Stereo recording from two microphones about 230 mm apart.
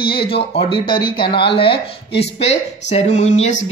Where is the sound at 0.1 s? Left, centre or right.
Left.